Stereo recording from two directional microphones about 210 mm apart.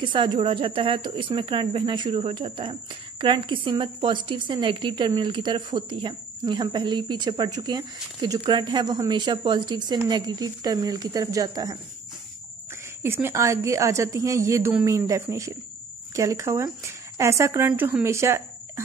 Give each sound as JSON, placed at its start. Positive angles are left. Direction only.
{"t": 0.0, "sound": "speech", "side_deg": -20}
{"t": 13.0, "sound": "a woman's voice", "side_deg": -10}